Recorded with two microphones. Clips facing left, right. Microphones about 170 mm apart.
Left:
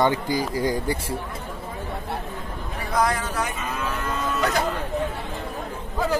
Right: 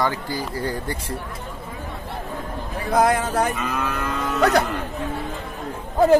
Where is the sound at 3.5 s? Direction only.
70° right (ahead or behind).